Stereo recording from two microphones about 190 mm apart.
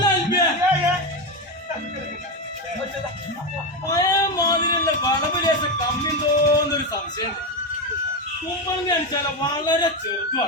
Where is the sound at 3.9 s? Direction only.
20° left (ahead or behind).